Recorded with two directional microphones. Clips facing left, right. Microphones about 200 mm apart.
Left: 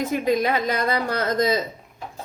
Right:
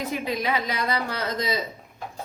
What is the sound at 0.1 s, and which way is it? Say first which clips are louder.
Speech: left 6 dB; 45° left (ahead or behind).